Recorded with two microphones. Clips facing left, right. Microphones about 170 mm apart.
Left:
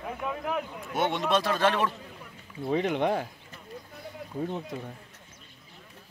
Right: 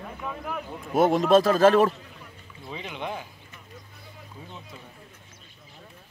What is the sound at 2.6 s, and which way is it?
Speech, 55° left (ahead or behind).